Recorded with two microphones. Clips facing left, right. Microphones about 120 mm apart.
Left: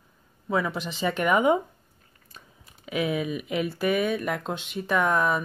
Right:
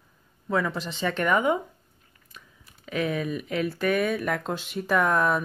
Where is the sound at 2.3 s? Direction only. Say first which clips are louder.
Even; 35° left (ahead or behind).